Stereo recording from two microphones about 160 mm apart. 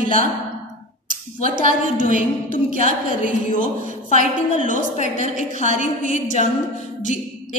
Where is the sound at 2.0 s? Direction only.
60° right (ahead or behind).